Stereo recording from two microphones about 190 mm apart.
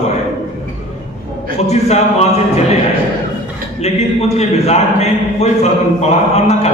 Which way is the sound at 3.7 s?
35° left (ahead or behind).